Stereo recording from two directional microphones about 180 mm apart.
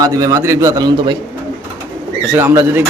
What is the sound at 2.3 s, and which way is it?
Speech, 15° right (ahead or behind).